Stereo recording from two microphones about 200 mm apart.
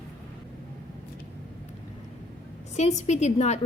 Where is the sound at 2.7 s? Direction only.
35° left (ahead or behind).